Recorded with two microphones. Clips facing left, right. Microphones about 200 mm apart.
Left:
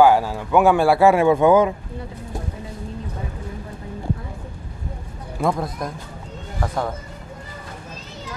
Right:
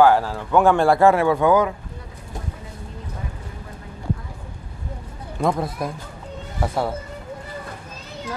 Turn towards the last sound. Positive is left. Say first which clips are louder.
# right 1 dB
turn(degrees=-10)  # may be behind; listen again after turning